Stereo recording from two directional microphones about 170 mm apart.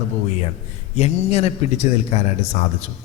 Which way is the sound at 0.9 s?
40° left (ahead or behind).